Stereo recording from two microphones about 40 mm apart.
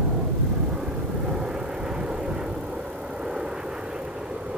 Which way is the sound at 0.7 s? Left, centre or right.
Centre.